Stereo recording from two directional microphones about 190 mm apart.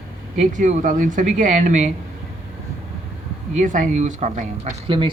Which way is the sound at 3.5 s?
45° right (ahead or behind).